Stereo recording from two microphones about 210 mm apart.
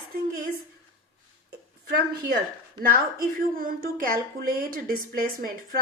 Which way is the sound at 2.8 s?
40° right (ahead or behind).